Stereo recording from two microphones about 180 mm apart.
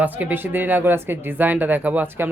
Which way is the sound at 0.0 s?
10° right (ahead or behind).